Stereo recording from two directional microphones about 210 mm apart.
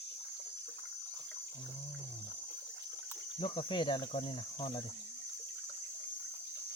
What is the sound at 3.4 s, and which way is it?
Speech, 20° left (ahead or behind).